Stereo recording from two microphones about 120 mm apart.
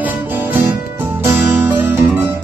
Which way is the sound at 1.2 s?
20° right (ahead or behind).